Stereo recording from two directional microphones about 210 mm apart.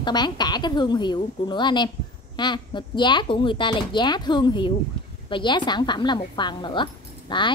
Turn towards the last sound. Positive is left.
turn(degrees=20)  # may be behind; listen again after turning